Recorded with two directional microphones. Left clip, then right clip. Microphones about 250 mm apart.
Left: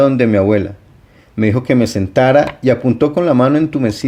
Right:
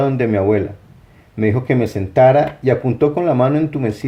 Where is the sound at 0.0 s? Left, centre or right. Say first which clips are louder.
Left 5 dB; left.